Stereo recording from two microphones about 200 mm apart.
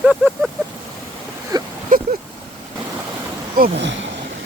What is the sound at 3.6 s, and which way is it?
Speech, 60° right (ahead or behind).